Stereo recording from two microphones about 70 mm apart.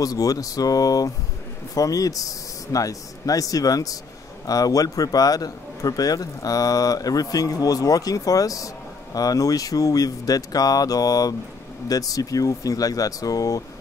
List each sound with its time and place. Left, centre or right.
0.0 s a man's voice: left